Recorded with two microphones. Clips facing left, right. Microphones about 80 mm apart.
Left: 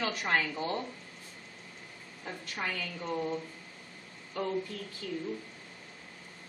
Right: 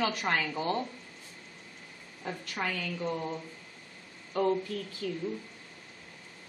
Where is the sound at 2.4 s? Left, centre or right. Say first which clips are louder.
Right 2 dB; right.